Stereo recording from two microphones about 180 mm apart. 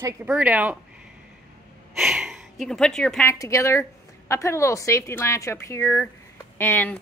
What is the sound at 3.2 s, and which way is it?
Speech, 15° left (ahead or behind).